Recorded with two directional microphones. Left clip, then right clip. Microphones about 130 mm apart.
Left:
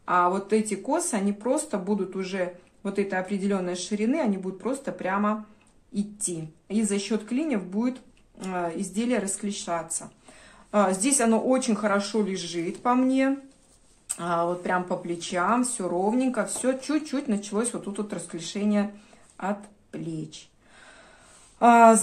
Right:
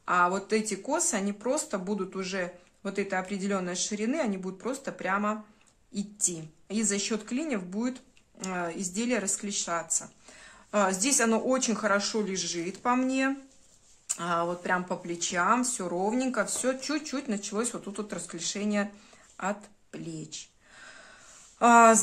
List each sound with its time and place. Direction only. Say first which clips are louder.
0.0 s speech: left 3 dB; 25° right (ahead or behind)
21.5 s speech: left 3 dB; 30° right (ahead or behind)